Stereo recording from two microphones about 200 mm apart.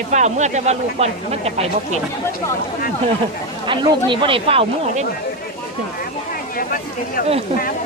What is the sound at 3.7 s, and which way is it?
Speech, 25° right (ahead or behind).